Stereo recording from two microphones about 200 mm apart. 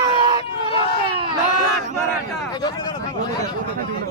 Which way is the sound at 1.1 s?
25° right (ahead or behind).